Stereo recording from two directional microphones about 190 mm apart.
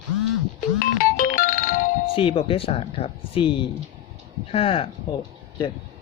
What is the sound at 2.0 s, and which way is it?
Speech, 30° left (ahead or behind).